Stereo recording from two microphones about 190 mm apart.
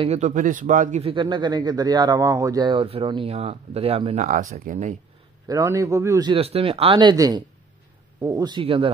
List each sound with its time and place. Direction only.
0.0 s speech: 35° right (ahead or behind)
5.5 s speech: 15° right (ahead or behind)